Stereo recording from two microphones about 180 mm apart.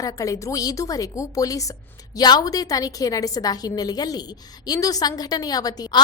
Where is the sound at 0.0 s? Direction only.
20° left (ahead or behind).